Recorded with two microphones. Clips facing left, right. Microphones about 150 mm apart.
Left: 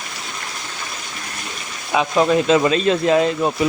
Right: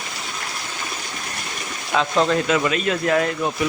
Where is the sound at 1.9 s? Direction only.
15° left (ahead or behind).